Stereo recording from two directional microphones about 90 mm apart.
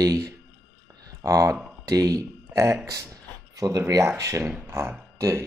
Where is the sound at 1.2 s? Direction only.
40° right (ahead or behind).